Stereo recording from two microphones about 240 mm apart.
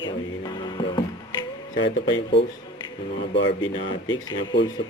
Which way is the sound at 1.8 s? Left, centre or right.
Left.